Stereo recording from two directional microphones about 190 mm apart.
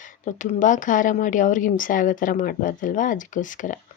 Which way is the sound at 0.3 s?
40° left (ahead or behind).